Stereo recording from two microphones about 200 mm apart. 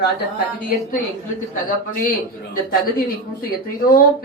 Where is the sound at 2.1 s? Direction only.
45° left (ahead or behind).